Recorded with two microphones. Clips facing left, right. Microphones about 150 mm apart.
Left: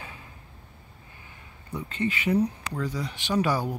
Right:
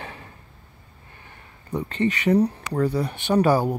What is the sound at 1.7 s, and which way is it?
Speech, 65° right (ahead or behind).